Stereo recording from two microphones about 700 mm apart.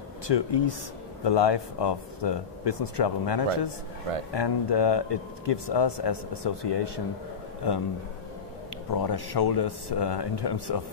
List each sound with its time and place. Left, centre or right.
0.3 s speech: left
8.9 s speech: left